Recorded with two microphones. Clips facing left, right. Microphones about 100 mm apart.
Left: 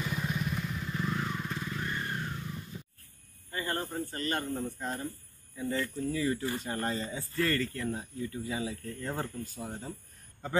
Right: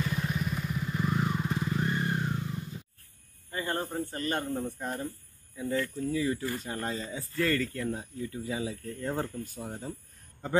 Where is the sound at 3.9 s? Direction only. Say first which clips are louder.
Right 2 dB; 15° right (ahead or behind).